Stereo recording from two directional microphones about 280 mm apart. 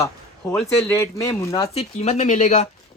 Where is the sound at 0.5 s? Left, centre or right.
Centre.